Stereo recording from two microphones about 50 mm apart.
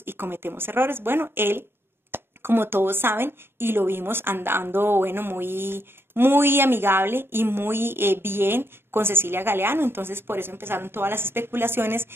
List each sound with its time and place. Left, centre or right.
0.0 s speech: right